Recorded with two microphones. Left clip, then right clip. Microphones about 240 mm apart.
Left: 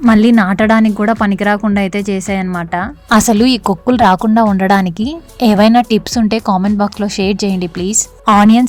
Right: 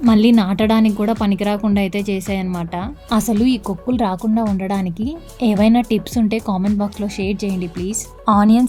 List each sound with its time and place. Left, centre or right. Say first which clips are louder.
0.0 s speech: left 5 dB; centre
3.1 s a woman's voice: left 8 dB; left